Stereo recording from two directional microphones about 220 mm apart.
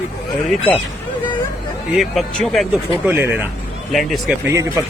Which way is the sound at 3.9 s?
Centre (ahead or behind).